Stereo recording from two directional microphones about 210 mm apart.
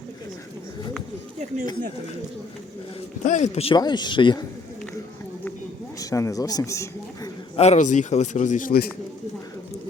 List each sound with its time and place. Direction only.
3.2 s speech: 35° left (ahead or behind)
6.0 s speech: 15° left (ahead or behind)
7.5 s a man's voice: 30° left (ahead or behind)